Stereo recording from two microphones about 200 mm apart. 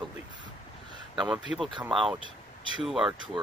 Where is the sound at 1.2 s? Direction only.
Centre (ahead or behind).